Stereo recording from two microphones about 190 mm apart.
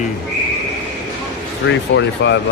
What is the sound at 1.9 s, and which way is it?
Speech, 70° left (ahead or behind).